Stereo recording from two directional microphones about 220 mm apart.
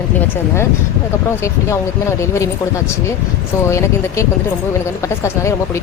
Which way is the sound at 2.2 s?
15° left (ahead or behind).